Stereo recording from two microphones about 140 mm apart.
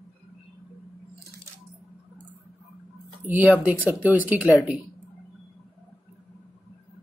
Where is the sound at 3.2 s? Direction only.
10° right (ahead or behind).